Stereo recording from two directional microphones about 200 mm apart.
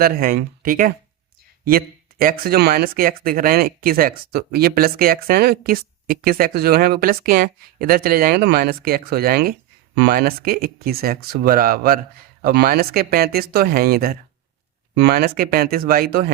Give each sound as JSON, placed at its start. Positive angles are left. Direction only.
{"t": 0.0, "sound": "speech", "side_deg": -45}